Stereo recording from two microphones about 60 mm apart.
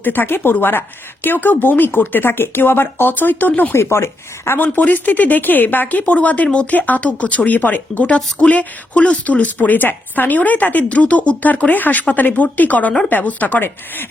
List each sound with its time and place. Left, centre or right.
0.0 s speech: left
3.8 s speech: left